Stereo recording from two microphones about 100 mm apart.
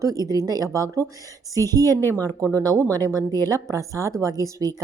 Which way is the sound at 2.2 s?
35° right (ahead or behind).